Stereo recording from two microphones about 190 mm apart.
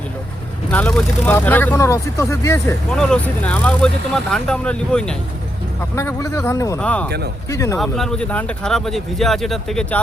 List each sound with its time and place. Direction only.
0.7 s speech: 5° left (ahead or behind)
2.9 s speech: 5° left (ahead or behind)
6.0 s speech: 15° left (ahead or behind)
7.8 s speech: centre (ahead or behind)